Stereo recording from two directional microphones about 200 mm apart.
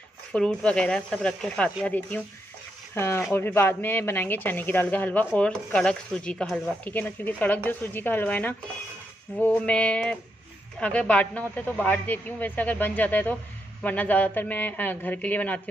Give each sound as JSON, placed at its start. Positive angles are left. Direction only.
{"t": 0.3, "sound": "speech", "side_deg": 5}